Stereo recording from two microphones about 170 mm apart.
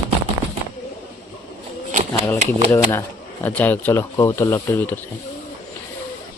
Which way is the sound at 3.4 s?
10° left (ahead or behind).